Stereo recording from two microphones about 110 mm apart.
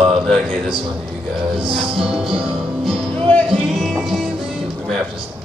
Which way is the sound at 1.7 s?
5° right (ahead or behind).